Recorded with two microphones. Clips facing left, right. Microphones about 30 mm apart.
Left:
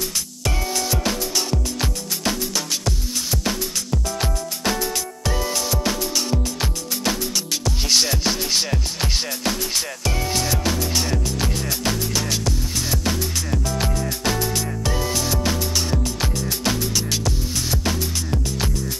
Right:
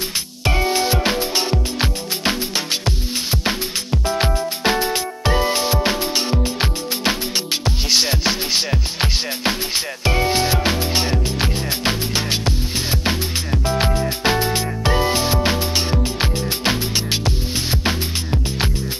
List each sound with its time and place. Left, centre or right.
0.5 s music: right
7.9 s music: centre
13.7 s music: right